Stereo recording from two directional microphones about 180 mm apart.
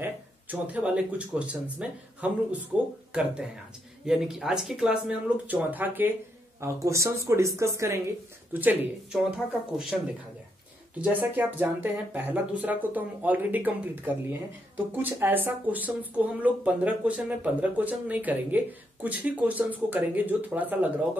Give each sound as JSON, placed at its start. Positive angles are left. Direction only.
{"t": 0.0, "sound": "speech", "side_deg": -10}
{"t": 11.0, "sound": "speech", "side_deg": -10}